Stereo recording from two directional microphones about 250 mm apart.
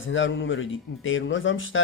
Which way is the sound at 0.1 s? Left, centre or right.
Left.